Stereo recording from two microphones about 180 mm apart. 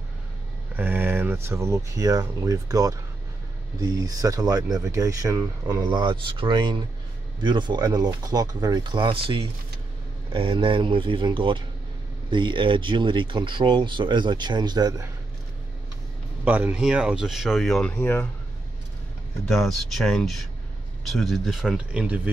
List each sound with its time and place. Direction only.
0.7 s speech: 10° right (ahead or behind)
16.4 s speech: 10° right (ahead or behind); by 18.3 s 10° left (ahead or behind)
19.4 s speech: centre (ahead or behind)